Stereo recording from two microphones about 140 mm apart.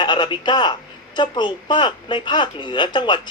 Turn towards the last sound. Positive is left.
turn(degrees=35)  # may be behind; listen again after turning